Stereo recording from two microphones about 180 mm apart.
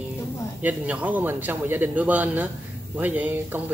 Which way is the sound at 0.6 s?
10° right (ahead or behind).